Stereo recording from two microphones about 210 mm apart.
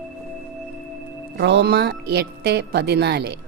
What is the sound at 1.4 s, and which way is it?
Speech, 55° right (ahead or behind).